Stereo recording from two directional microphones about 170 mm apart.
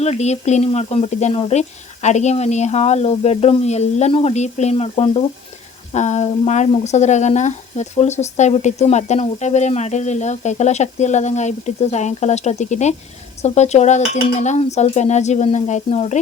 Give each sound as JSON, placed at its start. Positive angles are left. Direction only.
{"t": 0.0, "sound": "speech", "side_deg": 40}